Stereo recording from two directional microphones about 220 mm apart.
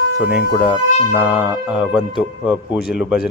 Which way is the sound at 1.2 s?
5° right (ahead or behind).